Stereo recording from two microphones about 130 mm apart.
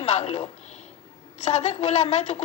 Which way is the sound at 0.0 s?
50° left (ahead or behind).